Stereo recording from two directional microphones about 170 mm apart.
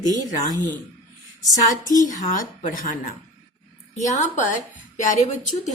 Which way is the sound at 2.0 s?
50° left (ahead or behind).